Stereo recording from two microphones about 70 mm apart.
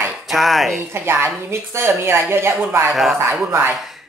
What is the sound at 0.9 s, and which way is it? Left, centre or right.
Speech, right.